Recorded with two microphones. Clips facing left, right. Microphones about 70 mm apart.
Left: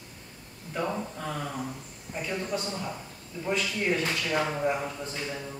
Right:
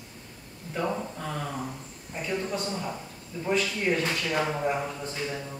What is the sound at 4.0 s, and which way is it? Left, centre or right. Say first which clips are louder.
Speech: right 1 dB; centre.